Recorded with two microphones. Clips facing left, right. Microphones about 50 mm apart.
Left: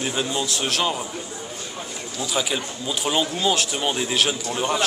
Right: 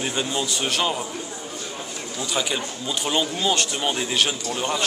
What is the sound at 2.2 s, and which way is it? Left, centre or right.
A man's voice, centre.